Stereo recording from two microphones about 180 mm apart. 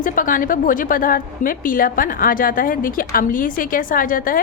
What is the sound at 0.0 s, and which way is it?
A woman's voice, 50° left (ahead or behind).